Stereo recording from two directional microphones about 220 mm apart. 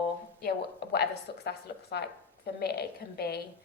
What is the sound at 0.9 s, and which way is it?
A woman's voice, 45° left (ahead or behind).